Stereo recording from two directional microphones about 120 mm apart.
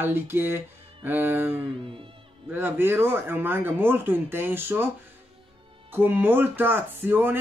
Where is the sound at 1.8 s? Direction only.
45° right (ahead or behind).